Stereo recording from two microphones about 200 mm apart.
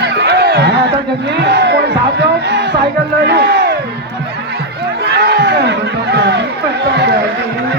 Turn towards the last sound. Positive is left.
turn(degrees=-55)  # may be behind; listen again after turning